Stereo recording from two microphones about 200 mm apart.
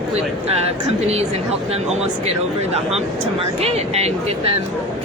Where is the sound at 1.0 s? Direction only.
30° right (ahead or behind).